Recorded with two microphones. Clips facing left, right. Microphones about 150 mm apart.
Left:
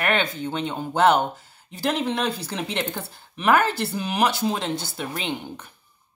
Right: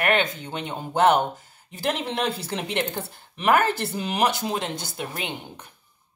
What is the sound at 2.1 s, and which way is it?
Speech, 25° right (ahead or behind).